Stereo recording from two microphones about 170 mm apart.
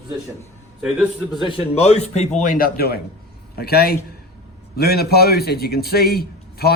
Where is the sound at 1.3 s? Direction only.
30° left (ahead or behind).